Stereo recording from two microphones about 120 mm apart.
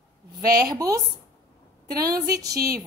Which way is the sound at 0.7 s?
30° right (ahead or behind).